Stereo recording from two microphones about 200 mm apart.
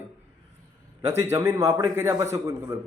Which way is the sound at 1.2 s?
15° right (ahead or behind).